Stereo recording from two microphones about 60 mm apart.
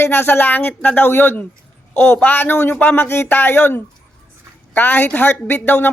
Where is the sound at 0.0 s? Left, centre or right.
Left.